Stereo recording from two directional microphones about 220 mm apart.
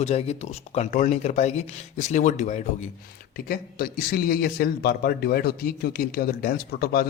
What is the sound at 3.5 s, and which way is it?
Speech, 45° left (ahead or behind).